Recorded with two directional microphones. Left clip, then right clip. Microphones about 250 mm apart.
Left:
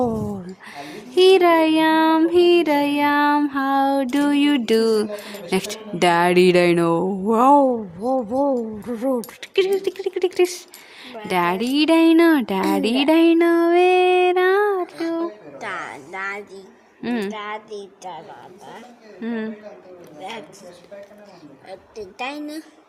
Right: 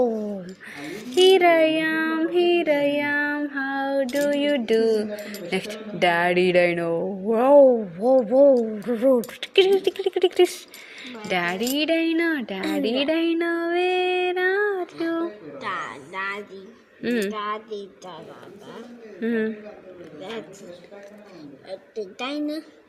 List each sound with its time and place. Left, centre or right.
0.8 s child singing: centre
8.0 s speech: centre
11.0 s a woman's voice: centre
19.2 s speech: centre
21.7 s a woman's voice: left